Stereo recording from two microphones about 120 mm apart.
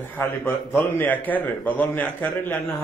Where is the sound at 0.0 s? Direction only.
15° left (ahead or behind).